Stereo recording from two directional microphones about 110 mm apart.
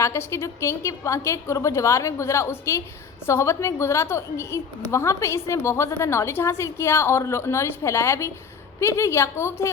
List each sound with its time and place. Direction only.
0.0 s a woman's voice: 25° left (ahead or behind)